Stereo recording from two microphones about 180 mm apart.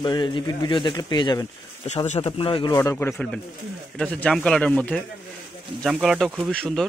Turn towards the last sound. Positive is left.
turn(degrees=5)  # may be behind; listen again after turning